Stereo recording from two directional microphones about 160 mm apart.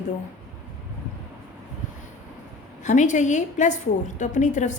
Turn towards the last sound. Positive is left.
turn(degrees=50)  # may be behind; listen again after turning